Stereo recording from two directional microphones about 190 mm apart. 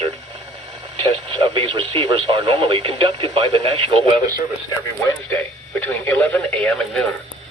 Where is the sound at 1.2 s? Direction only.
25° right (ahead or behind).